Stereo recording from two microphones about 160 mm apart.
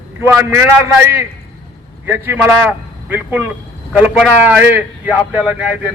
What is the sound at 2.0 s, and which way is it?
A man's voice, 10° right (ahead or behind).